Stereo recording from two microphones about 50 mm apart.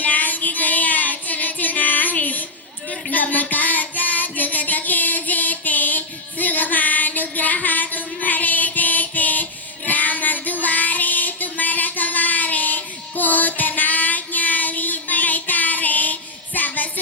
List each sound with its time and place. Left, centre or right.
0.0 s child singing: left
6.4 s music: left